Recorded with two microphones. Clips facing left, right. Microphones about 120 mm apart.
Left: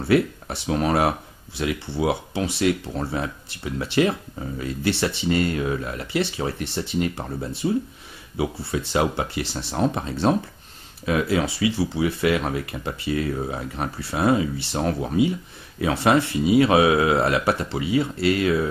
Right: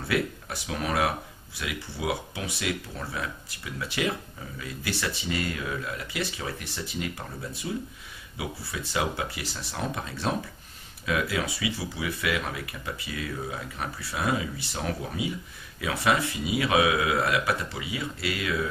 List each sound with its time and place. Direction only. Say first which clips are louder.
0.0 s speech: left 8 dB; 30° left (ahead or behind)